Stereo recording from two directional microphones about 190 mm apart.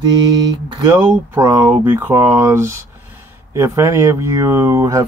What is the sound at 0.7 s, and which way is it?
Speech, 20° right (ahead or behind).